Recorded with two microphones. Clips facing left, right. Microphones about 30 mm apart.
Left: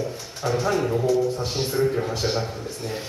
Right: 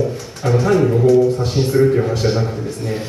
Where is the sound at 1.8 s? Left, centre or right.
Centre.